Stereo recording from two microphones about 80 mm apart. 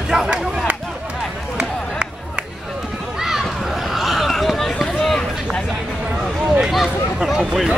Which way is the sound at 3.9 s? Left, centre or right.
Centre.